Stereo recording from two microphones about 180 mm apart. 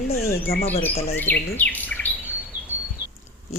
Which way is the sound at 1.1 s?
10° left (ahead or behind).